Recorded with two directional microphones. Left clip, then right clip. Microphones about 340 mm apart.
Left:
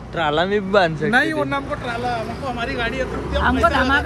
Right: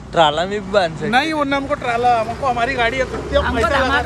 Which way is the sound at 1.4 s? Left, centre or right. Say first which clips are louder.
Right 4 dB; right.